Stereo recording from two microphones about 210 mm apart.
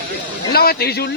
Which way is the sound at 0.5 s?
50° left (ahead or behind).